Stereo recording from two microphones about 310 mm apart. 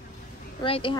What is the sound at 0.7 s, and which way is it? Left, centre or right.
Speech, centre.